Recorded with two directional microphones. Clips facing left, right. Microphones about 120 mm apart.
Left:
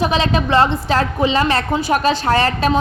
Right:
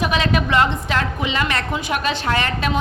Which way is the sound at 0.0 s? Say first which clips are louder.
Left 3 dB; 30° left (ahead or behind).